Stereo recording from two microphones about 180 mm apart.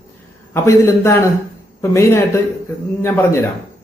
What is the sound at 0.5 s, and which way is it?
Speech, 15° left (ahead or behind).